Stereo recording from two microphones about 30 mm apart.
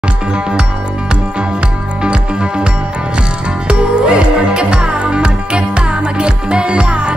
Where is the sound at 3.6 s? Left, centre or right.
Right.